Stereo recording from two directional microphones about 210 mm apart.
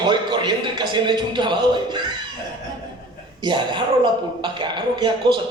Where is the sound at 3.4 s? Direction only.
20° right (ahead or behind).